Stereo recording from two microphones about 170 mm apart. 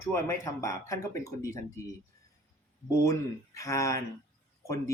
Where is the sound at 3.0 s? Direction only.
20° left (ahead or behind).